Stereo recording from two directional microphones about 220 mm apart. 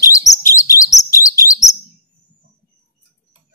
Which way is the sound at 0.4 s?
15° left (ahead or behind).